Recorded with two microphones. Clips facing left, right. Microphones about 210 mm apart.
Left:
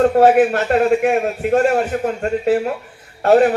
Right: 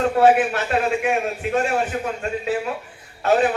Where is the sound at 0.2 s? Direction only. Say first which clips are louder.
Left 1 dB; 50° left (ahead or behind).